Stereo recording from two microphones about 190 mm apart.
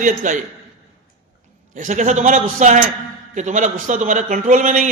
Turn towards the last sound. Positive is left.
turn(degrees=-40)  # may be behind; listen again after turning